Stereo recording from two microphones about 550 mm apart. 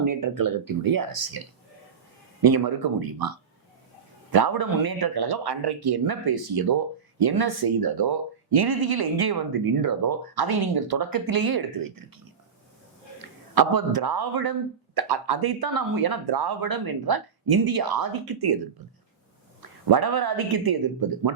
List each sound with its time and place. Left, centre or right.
0.0 s speech: right
2.4 s a man's voice: right
19.6 s speech: right